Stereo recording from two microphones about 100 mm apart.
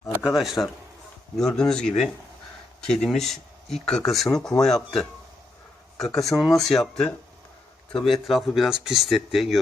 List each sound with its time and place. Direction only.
0.2 s speech: 5° right (ahead or behind)